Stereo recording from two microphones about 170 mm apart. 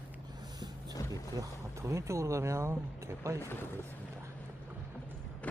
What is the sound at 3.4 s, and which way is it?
Speech, 15° left (ahead or behind).